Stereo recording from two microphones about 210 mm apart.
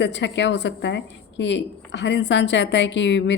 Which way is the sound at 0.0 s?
60° left (ahead or behind).